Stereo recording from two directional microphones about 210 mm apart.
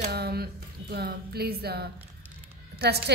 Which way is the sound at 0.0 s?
50° right (ahead or behind).